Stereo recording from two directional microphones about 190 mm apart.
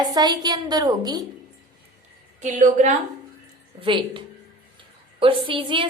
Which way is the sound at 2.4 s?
40° right (ahead or behind).